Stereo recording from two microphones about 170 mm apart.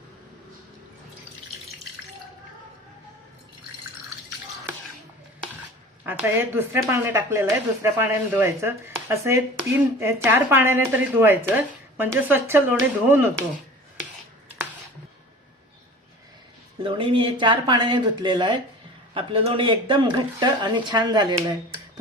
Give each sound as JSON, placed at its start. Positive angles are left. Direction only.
{"t": 6.1, "sound": "speech", "side_deg": -15}
{"t": 16.8, "sound": "speech", "side_deg": -30}